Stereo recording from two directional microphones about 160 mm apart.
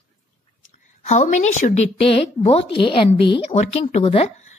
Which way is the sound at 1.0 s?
45° left (ahead or behind).